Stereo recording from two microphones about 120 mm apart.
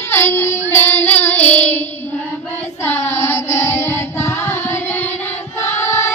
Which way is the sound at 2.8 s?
20° left (ahead or behind).